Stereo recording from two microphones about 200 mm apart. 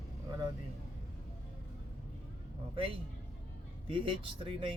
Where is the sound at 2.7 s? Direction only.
25° right (ahead or behind).